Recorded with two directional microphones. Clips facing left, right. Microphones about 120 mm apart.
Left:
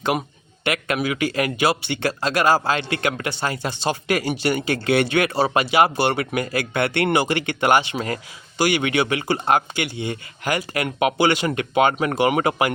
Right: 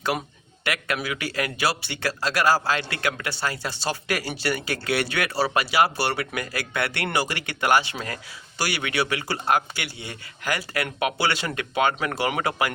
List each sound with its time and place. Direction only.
0.0 s speech: 20° left (ahead or behind)